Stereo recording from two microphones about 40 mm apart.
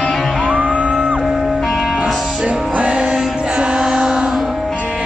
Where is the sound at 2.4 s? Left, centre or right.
Right.